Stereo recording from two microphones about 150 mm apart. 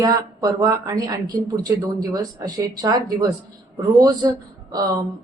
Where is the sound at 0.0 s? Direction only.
25° right (ahead or behind).